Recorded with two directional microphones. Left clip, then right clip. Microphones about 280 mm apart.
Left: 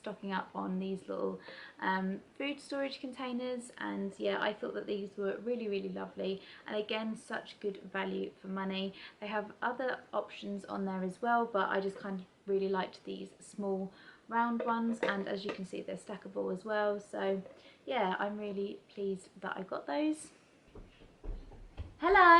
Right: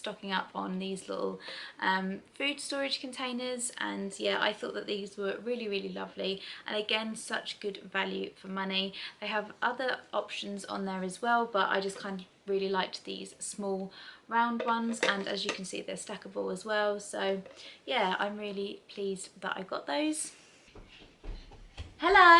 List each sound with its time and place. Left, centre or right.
0.5 s speech: centre
1.8 s speech: centre
13.6 s speech: centre
14.3 s speech: centre
16.2 s speech: centre
16.6 s speech: centre
22.0 s speech: centre